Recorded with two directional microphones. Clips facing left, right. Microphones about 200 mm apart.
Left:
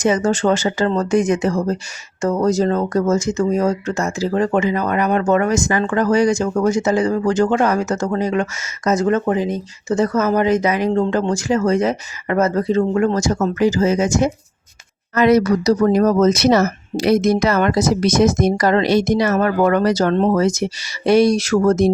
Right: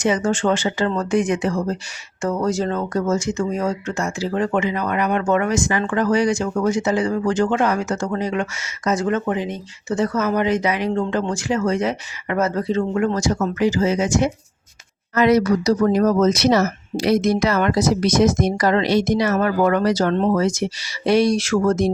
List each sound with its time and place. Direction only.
0.0 s speech: 40° left (ahead or behind)